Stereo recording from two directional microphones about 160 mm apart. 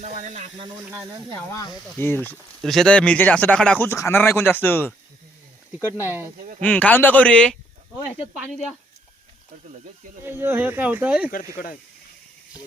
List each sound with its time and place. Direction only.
0.0 s speech: 45° right (ahead or behind)
0.9 s speech: 15° right (ahead or behind)
1.4 s speech: 15° left (ahead or behind)
2.6 s speech: centre (ahead or behind)
6.0 s speech: 15° right (ahead or behind)
6.3 s speech: 55° right (ahead or behind)
6.6 s speech: 10° left (ahead or behind)
10.2 s speech: 15° right (ahead or behind)
11.5 s speech: 65° left (ahead or behind)